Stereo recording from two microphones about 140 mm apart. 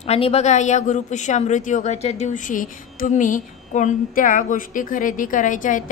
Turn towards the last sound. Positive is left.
turn(degrees=65)  # may be behind; listen again after turning